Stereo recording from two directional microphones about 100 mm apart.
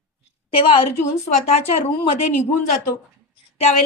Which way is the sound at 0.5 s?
65° left (ahead or behind).